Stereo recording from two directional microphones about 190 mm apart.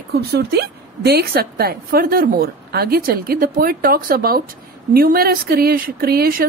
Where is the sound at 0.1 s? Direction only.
55° right (ahead or behind).